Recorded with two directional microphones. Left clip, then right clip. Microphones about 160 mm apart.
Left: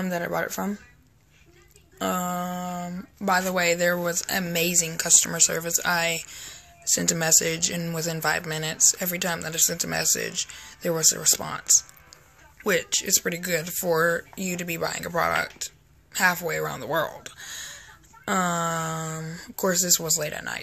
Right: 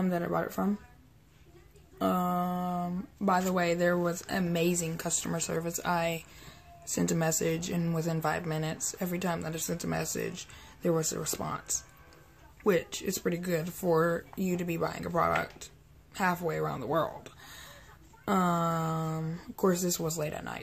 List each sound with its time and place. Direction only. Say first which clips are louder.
0.0 s speech: left 4 dB; 5° right (ahead or behind)
2.0 s speech: left 2 dB; centre (ahead or behind)